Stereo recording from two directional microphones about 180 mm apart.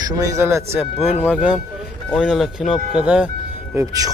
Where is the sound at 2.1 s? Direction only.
5° left (ahead or behind).